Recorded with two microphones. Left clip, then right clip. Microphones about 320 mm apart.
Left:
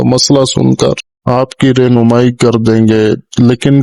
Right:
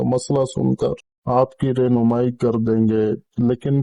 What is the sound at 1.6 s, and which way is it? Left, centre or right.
Speech, left.